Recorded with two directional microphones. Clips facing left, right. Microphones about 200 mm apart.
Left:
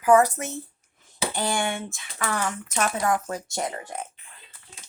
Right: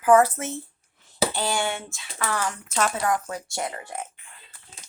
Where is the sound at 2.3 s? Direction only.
15° left (ahead or behind).